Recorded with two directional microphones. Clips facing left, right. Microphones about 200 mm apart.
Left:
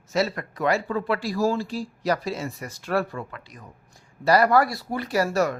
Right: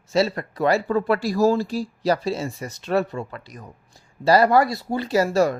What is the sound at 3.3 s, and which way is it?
Speech, 40° right (ahead or behind).